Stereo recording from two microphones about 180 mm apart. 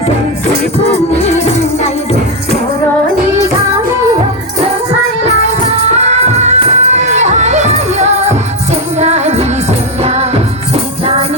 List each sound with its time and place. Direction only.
0.9 s music: 40° left (ahead or behind)
5.6 s music: 35° right (ahead or behind)